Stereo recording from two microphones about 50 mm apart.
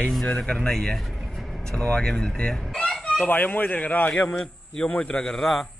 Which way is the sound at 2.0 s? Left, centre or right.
Centre.